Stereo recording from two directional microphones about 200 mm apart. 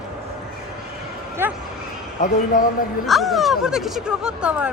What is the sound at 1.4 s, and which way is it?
Speech, 10° right (ahead or behind).